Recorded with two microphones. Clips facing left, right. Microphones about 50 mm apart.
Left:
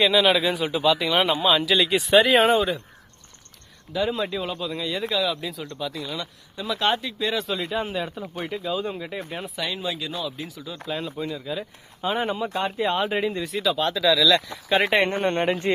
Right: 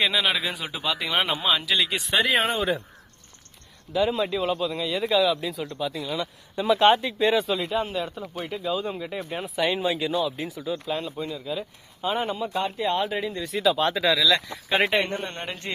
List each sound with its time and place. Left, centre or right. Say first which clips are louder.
0.0 s speech: left 5 dB; centre
1.5 s speech: left 4 dB; centre
3.9 s speech: right 1 dB; centre
6.6 s speech: right 5 dB; right
7.3 s speech: right 2 dB; centre
9.6 s speech: right 6 dB; right
10.8 s speech: even; centre
13.6 s speech: right 2 dB; centre
13.9 s speech: left 2 dB; right
14.3 s speech: left 2 dB; centre
15.0 s speech: left 9 dB; left